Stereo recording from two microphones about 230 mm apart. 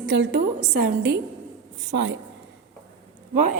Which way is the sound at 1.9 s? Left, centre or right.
Right.